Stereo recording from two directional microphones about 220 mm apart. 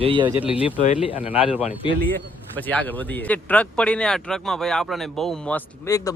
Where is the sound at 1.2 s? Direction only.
5° right (ahead or behind).